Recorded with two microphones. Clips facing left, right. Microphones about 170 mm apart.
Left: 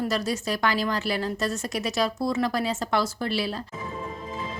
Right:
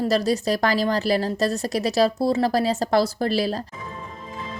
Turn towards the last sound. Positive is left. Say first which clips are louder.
# right 5 dB
turn(degrees=-40)  # may be behind; listen again after turning